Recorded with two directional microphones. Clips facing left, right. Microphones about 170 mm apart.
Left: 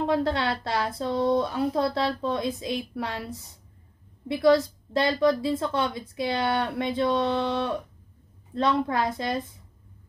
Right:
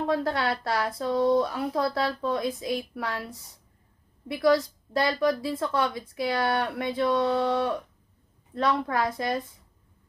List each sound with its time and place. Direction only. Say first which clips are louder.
0.0 s a woman's voice: left 1 dB; 25° left (ahead or behind)